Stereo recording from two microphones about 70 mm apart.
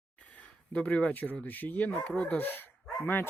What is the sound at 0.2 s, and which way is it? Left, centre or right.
Speech, centre.